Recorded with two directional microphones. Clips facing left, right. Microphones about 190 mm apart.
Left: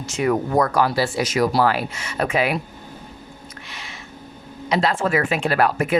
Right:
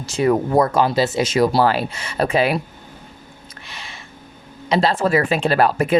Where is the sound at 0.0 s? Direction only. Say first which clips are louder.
Right 3 dB; 30° right (ahead or behind).